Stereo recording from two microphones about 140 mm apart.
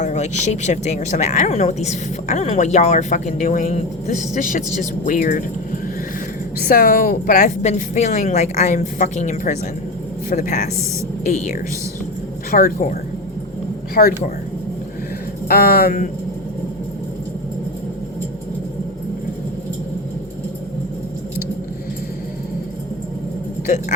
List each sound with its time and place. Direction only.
0.0 s a woman's voice: 55° left (ahead or behind)
6.6 s a woman's voice: 90° left
7.6 s a woman's voice: 55° left (ahead or behind)
12.5 s a woman's voice: 85° left
15.4 s a woman's voice: 90° left